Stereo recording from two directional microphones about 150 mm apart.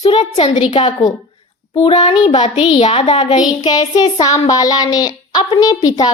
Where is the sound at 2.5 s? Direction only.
40° left (ahead or behind).